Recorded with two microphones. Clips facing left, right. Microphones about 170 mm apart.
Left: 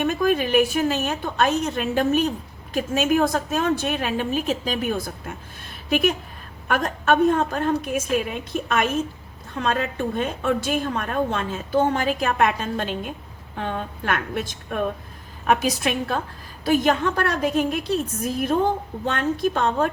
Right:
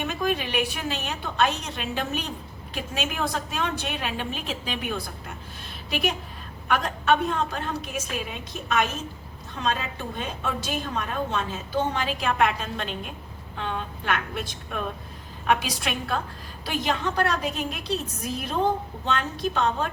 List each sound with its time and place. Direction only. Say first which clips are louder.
0.1 s a woman's voice: left 6 dB; 45° left (ahead or behind)
9.6 s a woman's voice: left 5 dB; 55° left (ahead or behind)